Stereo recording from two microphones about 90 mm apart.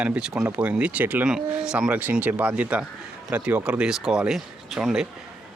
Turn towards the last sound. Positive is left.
turn(degrees=-5)  # may be behind; listen again after turning